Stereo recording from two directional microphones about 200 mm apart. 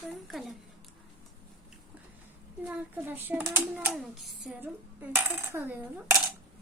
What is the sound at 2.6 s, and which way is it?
A child's voice, 10° right (ahead or behind).